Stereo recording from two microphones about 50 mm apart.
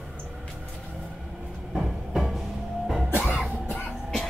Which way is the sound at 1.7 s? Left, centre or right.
Centre.